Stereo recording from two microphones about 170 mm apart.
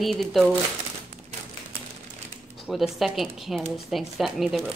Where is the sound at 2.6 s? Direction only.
Centre (ahead or behind).